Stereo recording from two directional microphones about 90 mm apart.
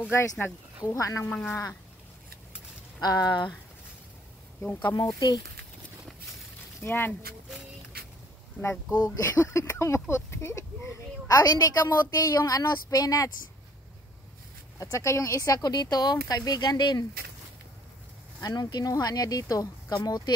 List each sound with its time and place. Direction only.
0.1 s speech: 30° left (ahead or behind)
1.3 s speech: 25° left (ahead or behind)
3.0 s speech: 50° left (ahead or behind)
4.9 s speech: 45° left (ahead or behind)
6.8 s speech: 20° left (ahead or behind)
9.1 s speech: 30° left (ahead or behind)
14.8 s speech: 35° left (ahead or behind); by 17.0 s 50° left (ahead or behind)
18.4 s speech: 50° left (ahead or behind)
19.9 s speech: 55° left (ahead or behind)